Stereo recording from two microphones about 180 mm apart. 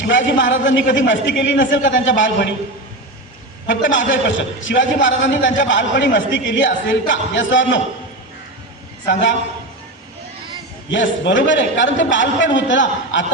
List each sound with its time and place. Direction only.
0.0 s a man's voice: 90° left
3.7 s a man's voice: 90° left
10.9 s a man's voice: 90° left